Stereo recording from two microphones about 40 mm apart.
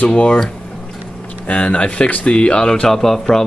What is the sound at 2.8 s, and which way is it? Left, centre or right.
Speech, centre.